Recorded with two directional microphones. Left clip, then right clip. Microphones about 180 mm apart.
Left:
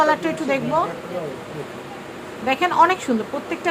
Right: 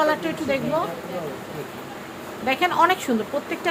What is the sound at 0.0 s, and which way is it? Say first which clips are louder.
Speech: left 3 dB; 15° left (ahead or behind).